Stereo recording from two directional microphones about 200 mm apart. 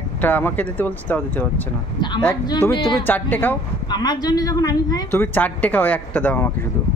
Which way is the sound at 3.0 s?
10° left (ahead or behind).